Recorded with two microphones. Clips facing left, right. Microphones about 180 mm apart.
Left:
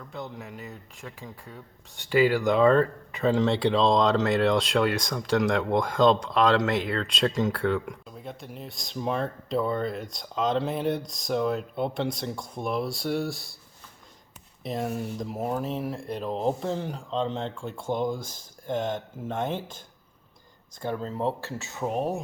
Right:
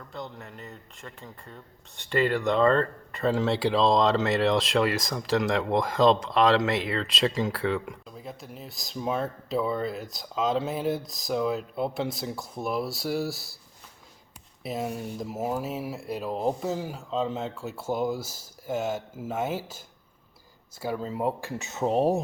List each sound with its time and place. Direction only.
0.0 s speech: 5° left (ahead or behind)
14.6 s speech: 5° right (ahead or behind)
20.8 s speech: 5° right (ahead or behind); by 22.2 s 35° right (ahead or behind)